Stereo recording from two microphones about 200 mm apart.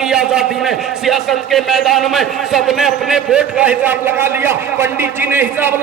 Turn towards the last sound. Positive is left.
turn(degrees=-10)  # may be behind; listen again after turning